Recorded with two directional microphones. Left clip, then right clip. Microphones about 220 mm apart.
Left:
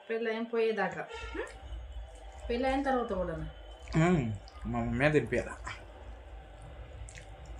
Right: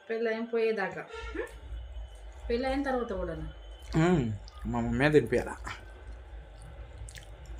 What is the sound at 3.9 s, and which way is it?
Speech, 15° right (ahead or behind).